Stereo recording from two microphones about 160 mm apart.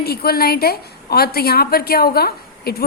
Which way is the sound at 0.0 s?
75° left (ahead or behind).